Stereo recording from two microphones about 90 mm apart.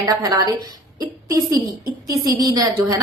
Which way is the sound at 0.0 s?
40° right (ahead or behind).